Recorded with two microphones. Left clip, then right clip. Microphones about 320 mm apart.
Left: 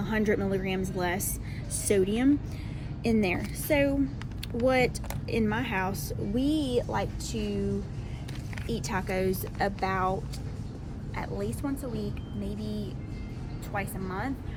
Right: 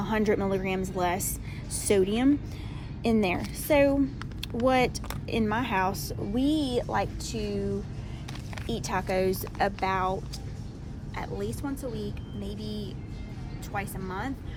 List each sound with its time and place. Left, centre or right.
0.0 s speech: right
8.6 s speech: right; by 12.0 s centre
13.7 s speech: centre